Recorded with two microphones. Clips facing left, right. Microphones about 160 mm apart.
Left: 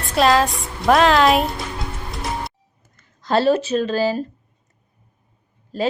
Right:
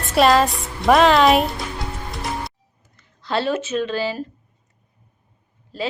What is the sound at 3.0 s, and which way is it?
Speech, 45° left (ahead or behind).